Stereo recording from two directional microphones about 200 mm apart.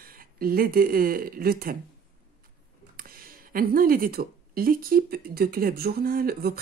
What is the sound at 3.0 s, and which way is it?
Speech, 45° right (ahead or behind).